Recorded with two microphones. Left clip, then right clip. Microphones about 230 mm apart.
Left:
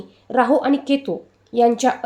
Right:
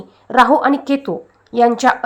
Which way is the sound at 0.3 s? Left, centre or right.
Centre.